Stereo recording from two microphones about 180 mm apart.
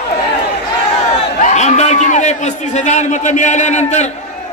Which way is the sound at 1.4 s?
40° left (ahead or behind).